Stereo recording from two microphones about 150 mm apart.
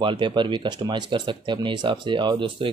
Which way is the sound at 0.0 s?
35° right (ahead or behind).